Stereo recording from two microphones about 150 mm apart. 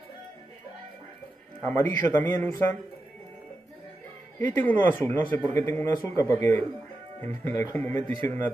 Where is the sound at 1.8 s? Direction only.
10° left (ahead or behind).